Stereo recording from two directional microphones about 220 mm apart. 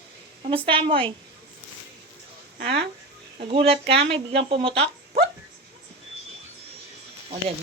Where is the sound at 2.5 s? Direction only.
45° right (ahead or behind).